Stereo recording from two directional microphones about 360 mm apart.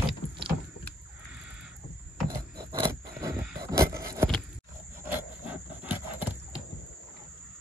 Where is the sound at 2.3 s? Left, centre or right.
Centre.